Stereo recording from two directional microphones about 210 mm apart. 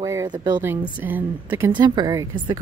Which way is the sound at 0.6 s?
10° right (ahead or behind).